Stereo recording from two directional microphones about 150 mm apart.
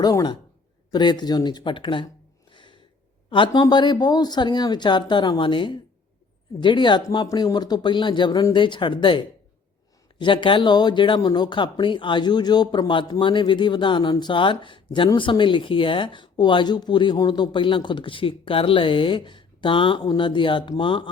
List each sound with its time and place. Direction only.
0.0 s speech: 25° left (ahead or behind)
2.5 s a sound: 30° left (ahead or behind)
3.2 s speech: 35° left (ahead or behind)